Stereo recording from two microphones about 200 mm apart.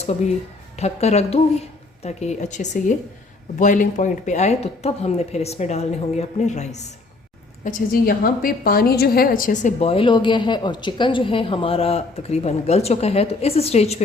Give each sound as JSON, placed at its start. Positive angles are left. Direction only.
{"t": 0.8, "sound": "a woman's voice", "side_deg": 30}